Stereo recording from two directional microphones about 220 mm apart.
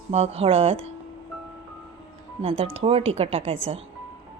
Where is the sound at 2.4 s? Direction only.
25° right (ahead or behind).